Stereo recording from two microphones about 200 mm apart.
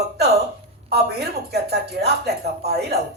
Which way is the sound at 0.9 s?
55° right (ahead or behind).